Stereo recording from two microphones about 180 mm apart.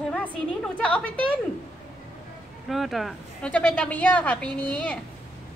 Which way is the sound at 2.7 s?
Centre (ahead or behind).